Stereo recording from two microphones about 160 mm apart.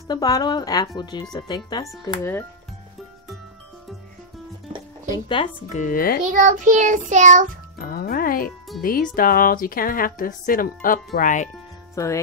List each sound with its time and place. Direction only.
0.1 s speech: 25° left (ahead or behind)
5.1 s speech: 30° left (ahead or behind)
5.7 s a woman's voice: 55° left (ahead or behind)
6.3 s child singing: 55° right (ahead or behind)
7.8 s a woman's voice: 70° left (ahead or behind)
11.9 s music: 20° left (ahead or behind)